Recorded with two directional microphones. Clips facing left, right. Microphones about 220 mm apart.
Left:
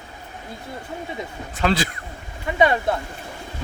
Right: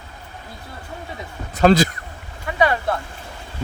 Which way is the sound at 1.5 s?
40° right (ahead or behind).